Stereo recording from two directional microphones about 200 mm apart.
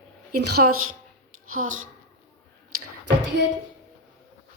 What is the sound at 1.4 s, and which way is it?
Speech, 90° right.